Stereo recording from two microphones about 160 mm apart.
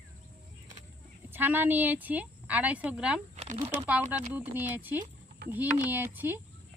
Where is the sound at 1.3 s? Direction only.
10° right (ahead or behind).